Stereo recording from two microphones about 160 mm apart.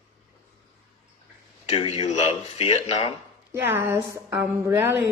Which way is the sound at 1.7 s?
40° left (ahead or behind).